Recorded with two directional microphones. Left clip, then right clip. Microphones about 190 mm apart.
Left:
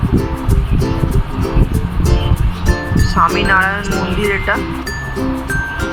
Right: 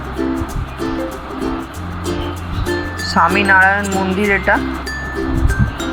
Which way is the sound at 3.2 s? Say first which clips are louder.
Right 1 dB; 15° right (ahead or behind).